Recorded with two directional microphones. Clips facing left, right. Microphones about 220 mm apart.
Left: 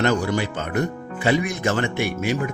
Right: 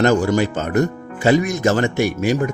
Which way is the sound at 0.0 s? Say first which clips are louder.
Right 5 dB; 45° right (ahead or behind).